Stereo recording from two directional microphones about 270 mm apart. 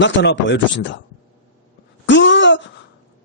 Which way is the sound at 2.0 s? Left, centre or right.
Left.